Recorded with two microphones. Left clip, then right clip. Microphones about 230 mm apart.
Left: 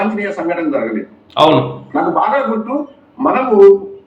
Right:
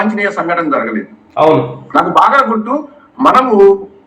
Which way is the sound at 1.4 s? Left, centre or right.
Left.